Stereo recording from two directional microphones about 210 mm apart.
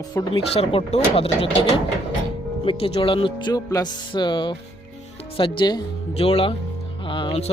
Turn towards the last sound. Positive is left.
turn(degrees=30)  # may be behind; listen again after turning